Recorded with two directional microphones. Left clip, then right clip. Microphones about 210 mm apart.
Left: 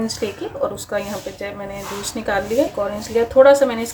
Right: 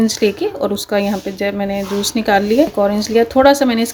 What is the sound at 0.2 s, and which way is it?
A woman's voice, 45° right (ahead or behind).